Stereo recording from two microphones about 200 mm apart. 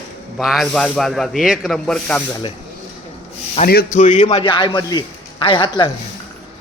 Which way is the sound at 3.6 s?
45° left (ahead or behind).